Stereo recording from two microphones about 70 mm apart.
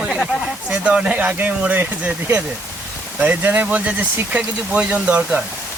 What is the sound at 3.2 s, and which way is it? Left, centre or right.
Speech, right.